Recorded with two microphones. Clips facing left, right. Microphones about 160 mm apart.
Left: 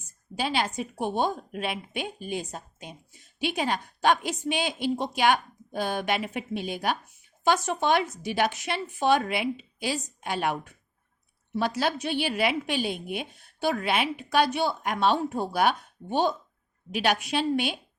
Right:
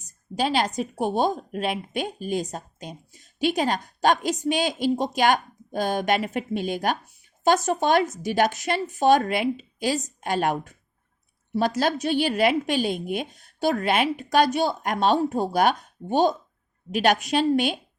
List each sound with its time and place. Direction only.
0.3 s a woman's voice: 45° right (ahead or behind)